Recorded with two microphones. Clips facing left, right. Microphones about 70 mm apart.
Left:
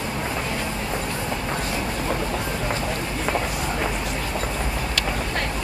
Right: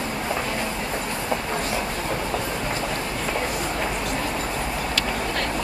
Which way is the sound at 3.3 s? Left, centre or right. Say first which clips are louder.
Left 1 dB; centre.